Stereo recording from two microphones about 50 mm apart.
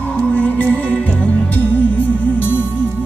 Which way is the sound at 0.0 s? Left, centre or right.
Left.